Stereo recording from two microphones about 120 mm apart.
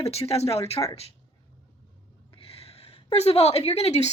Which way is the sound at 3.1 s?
60° left (ahead or behind).